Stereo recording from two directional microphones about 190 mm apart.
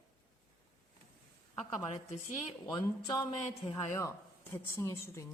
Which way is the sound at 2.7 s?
20° left (ahead or behind).